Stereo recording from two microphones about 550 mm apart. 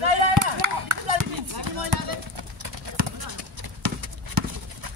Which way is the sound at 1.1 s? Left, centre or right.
Right.